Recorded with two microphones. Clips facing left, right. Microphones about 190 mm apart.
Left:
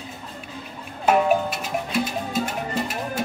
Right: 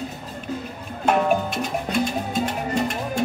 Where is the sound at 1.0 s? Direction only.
5° left (ahead or behind).